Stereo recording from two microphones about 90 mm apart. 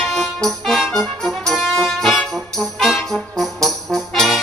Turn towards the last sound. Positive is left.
turn(degrees=0)  # may be behind; listen again after turning